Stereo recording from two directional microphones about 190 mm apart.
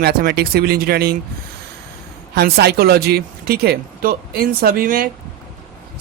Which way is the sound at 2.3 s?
60° right (ahead or behind).